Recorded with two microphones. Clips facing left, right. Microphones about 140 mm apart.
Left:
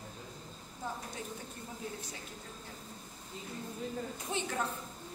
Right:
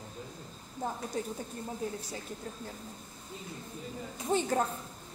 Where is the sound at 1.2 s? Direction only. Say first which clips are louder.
Right 8 dB; 40° right (ahead or behind).